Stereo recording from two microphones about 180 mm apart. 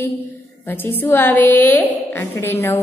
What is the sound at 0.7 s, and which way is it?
A woman's voice, 10° left (ahead or behind).